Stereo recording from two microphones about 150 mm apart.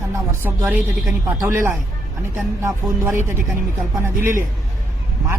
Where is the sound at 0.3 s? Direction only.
15° right (ahead or behind).